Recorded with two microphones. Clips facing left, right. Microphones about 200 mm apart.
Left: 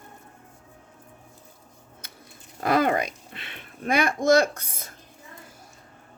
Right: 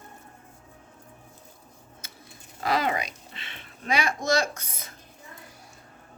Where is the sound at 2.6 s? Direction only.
50° left (ahead or behind).